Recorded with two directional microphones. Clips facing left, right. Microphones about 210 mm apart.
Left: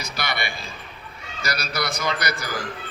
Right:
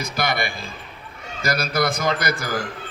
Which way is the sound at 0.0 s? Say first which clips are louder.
Right 5 dB; 50° right (ahead or behind).